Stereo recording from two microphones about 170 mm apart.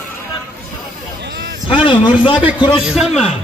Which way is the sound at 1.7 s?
30° left (ahead or behind).